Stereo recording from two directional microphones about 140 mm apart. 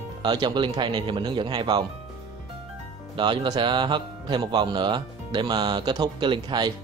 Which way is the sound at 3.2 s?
35° right (ahead or behind).